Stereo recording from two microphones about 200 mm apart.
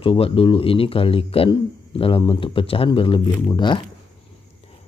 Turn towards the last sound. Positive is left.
turn(degrees=20)  # may be behind; listen again after turning